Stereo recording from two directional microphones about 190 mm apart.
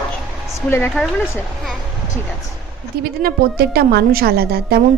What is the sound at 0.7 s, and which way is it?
A woman's voice, 15° left (ahead or behind).